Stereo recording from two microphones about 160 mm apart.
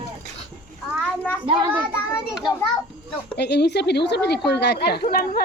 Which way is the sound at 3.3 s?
90° left.